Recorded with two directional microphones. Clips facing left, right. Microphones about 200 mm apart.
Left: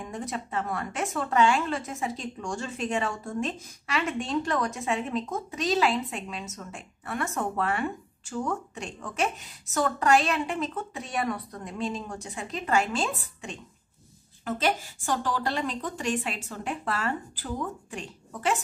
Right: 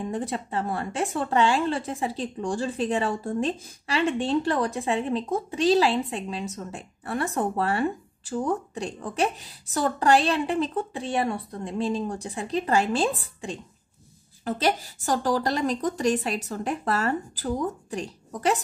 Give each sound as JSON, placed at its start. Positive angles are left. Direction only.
{"t": 0.0, "sound": "speech", "side_deg": -30}